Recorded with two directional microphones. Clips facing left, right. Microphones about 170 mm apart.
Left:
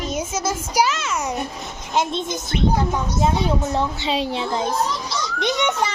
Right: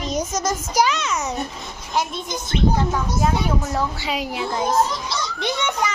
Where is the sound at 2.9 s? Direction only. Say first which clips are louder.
Left 1 dB; 25° left (ahead or behind).